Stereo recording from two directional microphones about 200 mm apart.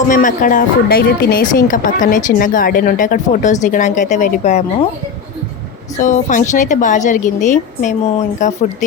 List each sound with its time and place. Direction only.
0.1 s a woman's voice: 40° left (ahead or behind)
6.0 s a woman's voice: 40° left (ahead or behind)